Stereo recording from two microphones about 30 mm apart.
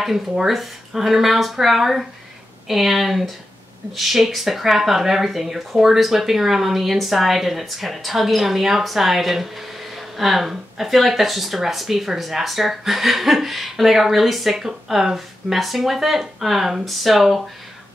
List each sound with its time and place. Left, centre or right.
0.5 s speech: centre
14.7 s speech: centre